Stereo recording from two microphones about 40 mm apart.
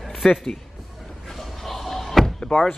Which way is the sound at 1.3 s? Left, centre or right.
Centre.